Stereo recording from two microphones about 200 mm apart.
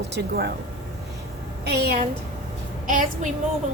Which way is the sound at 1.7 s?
55° right (ahead or behind).